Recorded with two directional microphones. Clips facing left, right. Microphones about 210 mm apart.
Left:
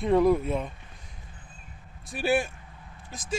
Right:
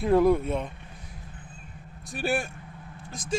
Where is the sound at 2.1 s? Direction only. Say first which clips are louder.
Left 3 dB; centre (ahead or behind).